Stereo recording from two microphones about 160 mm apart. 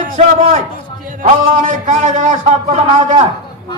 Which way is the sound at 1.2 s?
50° right (ahead or behind).